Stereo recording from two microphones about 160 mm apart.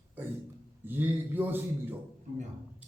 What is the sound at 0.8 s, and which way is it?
Speech, 10° right (ahead or behind).